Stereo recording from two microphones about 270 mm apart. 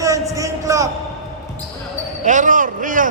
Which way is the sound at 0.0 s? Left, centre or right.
Centre.